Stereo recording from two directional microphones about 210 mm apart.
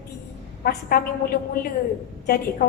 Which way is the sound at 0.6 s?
45° left (ahead or behind).